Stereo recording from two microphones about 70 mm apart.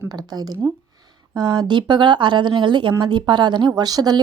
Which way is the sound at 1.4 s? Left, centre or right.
Right.